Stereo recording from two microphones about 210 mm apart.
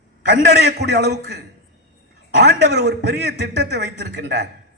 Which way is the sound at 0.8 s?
50° right (ahead or behind).